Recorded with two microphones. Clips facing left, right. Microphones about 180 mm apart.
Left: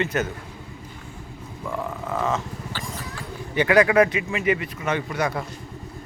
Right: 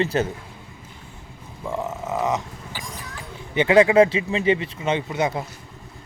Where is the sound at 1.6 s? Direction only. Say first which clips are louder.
Right 2 dB; 20° right (ahead or behind).